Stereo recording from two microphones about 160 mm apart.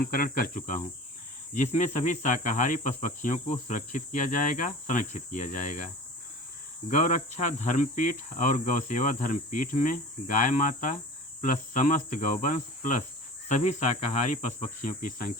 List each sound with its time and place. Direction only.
0.0 s speech: 65° left (ahead or behind)
1.5 s cricket: 45° left (ahead or behind)
6.9 s cricket: 50° left (ahead or behind)